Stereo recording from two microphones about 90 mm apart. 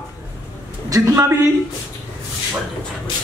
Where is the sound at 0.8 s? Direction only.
40° right (ahead or behind).